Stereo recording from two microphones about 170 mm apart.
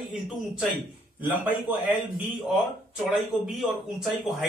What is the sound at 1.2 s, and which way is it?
Speech, 10° right (ahead or behind).